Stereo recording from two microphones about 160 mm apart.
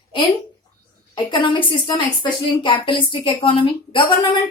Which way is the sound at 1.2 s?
30° left (ahead or behind).